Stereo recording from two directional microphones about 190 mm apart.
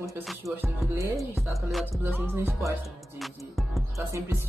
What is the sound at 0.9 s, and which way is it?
Music, 15° right (ahead or behind).